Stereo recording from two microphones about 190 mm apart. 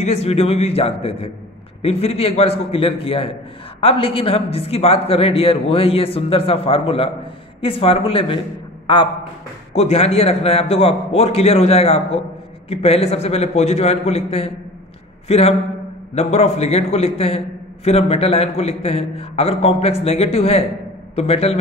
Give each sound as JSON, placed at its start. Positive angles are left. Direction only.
{"t": 0.0, "sound": "a man's voice", "side_deg": 35}